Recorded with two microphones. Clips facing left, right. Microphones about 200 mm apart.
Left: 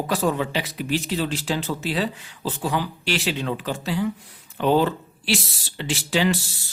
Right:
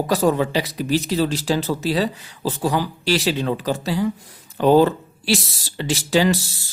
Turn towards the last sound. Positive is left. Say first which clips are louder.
# right 4 dB
turn(degrees=-40)  # may be behind; listen again after turning